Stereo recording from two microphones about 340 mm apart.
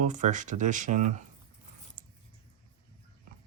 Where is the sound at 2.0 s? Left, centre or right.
Right.